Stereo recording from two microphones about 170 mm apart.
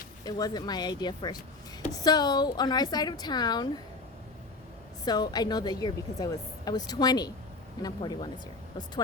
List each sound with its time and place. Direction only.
0.3 s a woman's voice: 25° left (ahead or behind)
5.0 s a woman's voice: 25° left (ahead or behind)